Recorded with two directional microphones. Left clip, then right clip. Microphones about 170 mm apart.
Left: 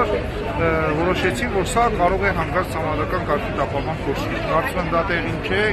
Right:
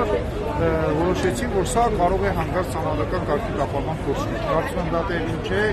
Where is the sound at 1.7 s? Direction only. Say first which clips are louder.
Left 2 dB; 10° right (ahead or behind).